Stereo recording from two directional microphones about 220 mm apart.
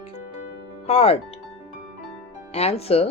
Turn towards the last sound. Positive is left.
turn(degrees=25)  # may be behind; listen again after turning